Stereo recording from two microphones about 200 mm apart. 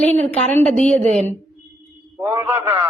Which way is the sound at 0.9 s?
35° right (ahead or behind).